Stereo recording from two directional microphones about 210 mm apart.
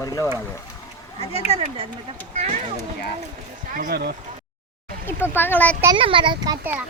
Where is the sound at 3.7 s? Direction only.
45° right (ahead or behind).